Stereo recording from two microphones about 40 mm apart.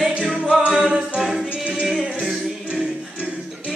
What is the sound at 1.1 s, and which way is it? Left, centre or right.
Music, centre.